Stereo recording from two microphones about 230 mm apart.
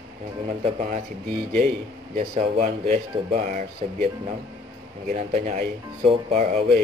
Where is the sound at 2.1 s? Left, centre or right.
Right.